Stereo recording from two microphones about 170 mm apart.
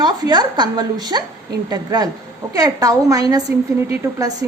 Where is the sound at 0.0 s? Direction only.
25° right (ahead or behind).